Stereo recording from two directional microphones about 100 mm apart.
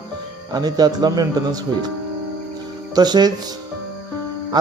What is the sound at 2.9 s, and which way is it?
Speech, 45° right (ahead or behind).